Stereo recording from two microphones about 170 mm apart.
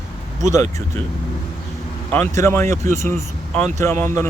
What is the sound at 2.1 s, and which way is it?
Speech, 15° left (ahead or behind).